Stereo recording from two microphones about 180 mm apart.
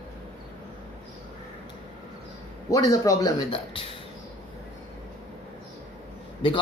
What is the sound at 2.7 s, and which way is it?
Speech, 20° left (ahead or behind).